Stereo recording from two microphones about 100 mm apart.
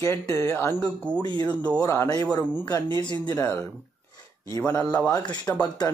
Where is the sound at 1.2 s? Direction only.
45° left (ahead or behind).